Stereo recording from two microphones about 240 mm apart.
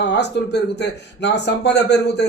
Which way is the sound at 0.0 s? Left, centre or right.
Left.